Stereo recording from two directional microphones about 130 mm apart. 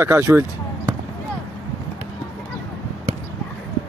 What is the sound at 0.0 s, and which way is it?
Speech, 15° right (ahead or behind).